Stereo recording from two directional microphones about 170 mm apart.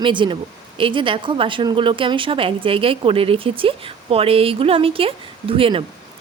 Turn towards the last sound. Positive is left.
turn(degrees=-30)  # may be behind; listen again after turning